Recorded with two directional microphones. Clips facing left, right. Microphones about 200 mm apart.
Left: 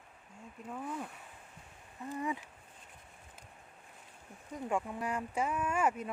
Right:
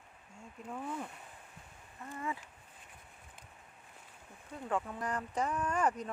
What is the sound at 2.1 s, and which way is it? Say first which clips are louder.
Speech: left 3 dB; 15° left (ahead or behind).